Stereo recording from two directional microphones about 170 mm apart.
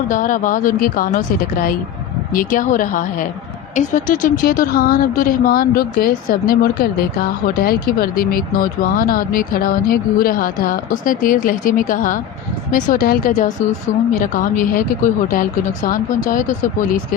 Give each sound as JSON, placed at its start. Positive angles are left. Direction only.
{"t": 0.1, "sound": "speech", "side_deg": 50}
{"t": 2.3, "sound": "speech", "side_deg": 50}